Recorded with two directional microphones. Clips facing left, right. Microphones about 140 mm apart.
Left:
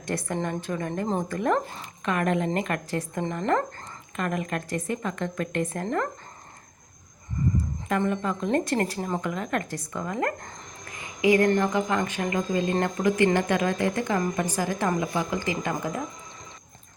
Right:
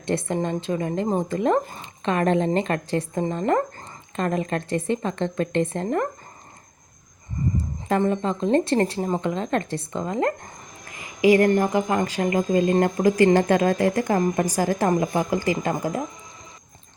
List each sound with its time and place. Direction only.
0.0 s a woman's voice: 25° right (ahead or behind)
7.5 s a woman's voice: 30° right (ahead or behind)
15.0 s speech: 45° right (ahead or behind)
15.6 s a woman's voice: 30° right (ahead or behind)